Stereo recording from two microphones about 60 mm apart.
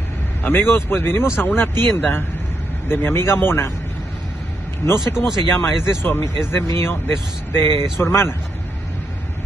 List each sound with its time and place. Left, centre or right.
0.4 s speech: left
4.8 s speech: left